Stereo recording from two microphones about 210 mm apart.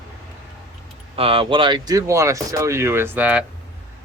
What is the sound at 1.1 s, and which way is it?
Speech, 25° right (ahead or behind).